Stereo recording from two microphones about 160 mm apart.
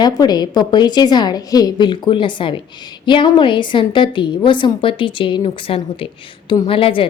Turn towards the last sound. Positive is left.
turn(degrees=35)  # may be behind; listen again after turning